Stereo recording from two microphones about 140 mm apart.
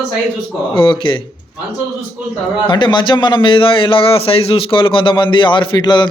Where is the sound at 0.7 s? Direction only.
35° left (ahead or behind).